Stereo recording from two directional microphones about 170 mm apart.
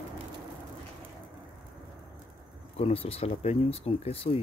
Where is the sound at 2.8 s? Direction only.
35° left (ahead or behind).